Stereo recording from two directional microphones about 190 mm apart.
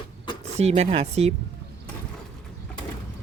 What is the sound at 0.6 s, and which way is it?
Speech, 35° right (ahead or behind).